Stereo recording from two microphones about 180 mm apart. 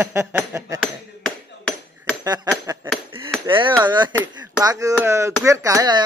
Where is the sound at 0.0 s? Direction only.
10° right (ahead or behind).